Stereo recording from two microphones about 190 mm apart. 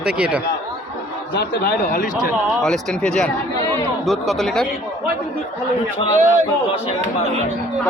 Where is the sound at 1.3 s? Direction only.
55° left (ahead or behind).